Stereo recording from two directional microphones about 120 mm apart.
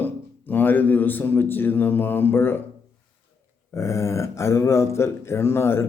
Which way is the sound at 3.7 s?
25° left (ahead or behind).